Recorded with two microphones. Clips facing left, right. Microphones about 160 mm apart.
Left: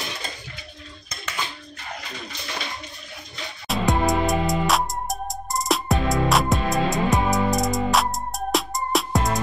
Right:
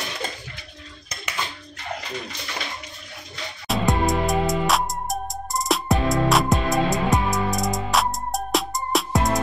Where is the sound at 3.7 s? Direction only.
Centre (ahead or behind).